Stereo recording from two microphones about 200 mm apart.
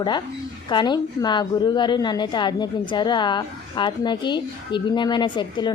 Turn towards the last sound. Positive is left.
turn(degrees=25)  # may be behind; listen again after turning